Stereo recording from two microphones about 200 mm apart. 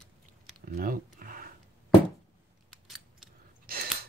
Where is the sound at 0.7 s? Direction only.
45° right (ahead or behind).